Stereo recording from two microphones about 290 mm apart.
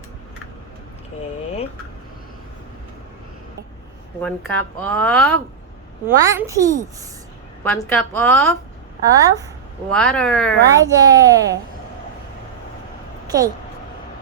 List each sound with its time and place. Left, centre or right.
4.2 s speech: centre
6.1 s a child's voice: centre
7.6 s a woman's voice: centre
9.0 s a child's voice: centre
9.9 s speech: centre
10.8 s a child's voice: centre
13.2 s speech: centre